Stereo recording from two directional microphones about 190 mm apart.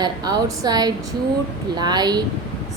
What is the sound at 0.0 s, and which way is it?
A woman's voice, 20° right (ahead or behind).